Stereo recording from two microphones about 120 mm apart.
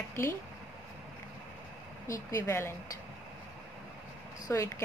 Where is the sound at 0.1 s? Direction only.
20° left (ahead or behind).